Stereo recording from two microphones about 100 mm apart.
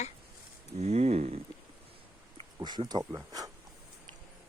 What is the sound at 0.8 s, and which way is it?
Speech, 90° right.